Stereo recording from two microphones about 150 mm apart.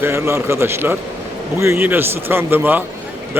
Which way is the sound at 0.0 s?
15° right (ahead or behind).